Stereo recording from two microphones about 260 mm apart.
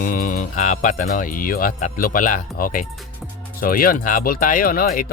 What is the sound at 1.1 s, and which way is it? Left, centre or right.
Speech, left.